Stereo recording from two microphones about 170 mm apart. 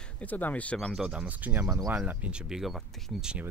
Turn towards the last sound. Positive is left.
turn(degrees=-5)  # may be behind; listen again after turning